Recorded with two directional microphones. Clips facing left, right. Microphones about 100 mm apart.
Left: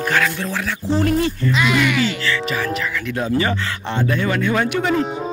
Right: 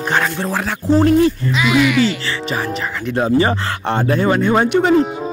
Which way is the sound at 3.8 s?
45° right (ahead or behind).